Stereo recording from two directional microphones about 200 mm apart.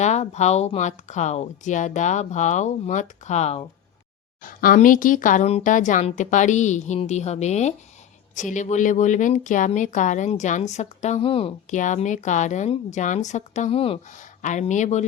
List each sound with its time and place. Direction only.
0.0 s a woman's voice: 35° left (ahead or behind)
4.4 s a woman's voice: 45° left (ahead or behind)